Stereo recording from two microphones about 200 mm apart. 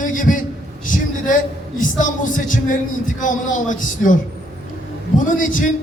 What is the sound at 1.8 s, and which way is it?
A man's voice, 40° left (ahead or behind).